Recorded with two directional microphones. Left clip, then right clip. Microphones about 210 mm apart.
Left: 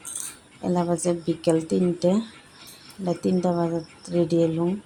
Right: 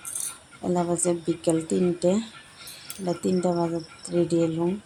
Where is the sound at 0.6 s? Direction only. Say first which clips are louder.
Left 1 dB; 5° left (ahead or behind).